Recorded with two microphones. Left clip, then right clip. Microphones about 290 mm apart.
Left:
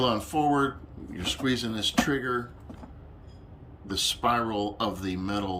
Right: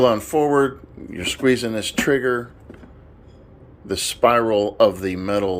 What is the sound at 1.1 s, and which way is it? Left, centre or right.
Speech, left.